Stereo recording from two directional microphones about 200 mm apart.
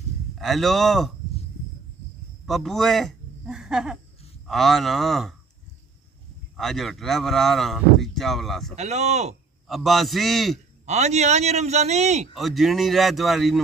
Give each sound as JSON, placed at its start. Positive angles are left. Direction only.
{"t": 0.4, "sound": "speech", "side_deg": 0}
{"t": 2.4, "sound": "speech", "side_deg": 0}
{"t": 6.5, "sound": "speech", "side_deg": 0}
{"t": 8.7, "sound": "a man's voice", "side_deg": -35}
{"t": 9.7, "sound": "speech", "side_deg": 0}
{"t": 10.9, "sound": "a man's voice", "side_deg": -35}
{"t": 12.4, "sound": "speech", "side_deg": 0}